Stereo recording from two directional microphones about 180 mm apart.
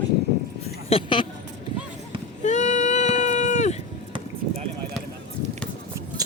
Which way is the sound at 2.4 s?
40° left (ahead or behind).